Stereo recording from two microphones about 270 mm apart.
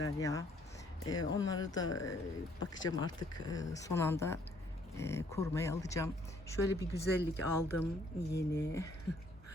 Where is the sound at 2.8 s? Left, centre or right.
Centre.